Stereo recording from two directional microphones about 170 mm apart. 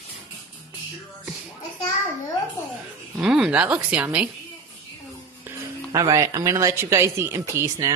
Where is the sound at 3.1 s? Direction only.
5° right (ahead or behind).